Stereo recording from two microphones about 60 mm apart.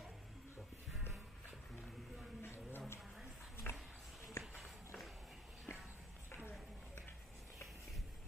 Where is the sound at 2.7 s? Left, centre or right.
Left.